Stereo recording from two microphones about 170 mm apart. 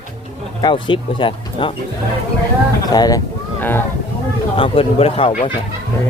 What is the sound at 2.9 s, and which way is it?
Speech, 20° left (ahead or behind).